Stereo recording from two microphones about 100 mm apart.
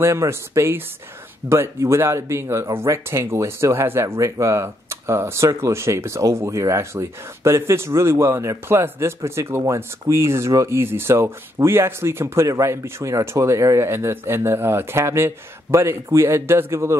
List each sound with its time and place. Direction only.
0.0 s speech: 25° right (ahead or behind)